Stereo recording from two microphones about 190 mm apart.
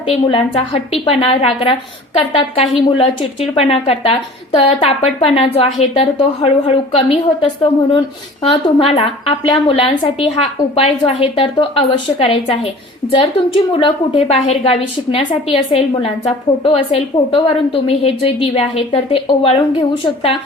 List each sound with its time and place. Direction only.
0.1 s a woman's voice: 30° left (ahead or behind)
8.4 s a woman's voice: 30° left (ahead or behind)